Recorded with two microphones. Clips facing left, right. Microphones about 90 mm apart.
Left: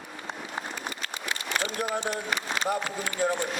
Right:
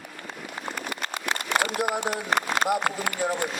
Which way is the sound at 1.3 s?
60° right (ahead or behind).